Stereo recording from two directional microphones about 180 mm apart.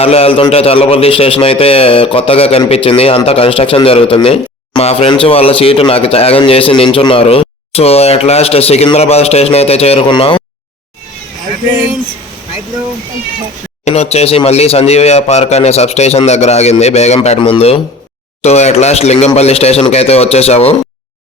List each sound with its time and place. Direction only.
0.0 s a man's voice: 35° left (ahead or behind)
13.8 s a man's voice: 35° left (ahead or behind)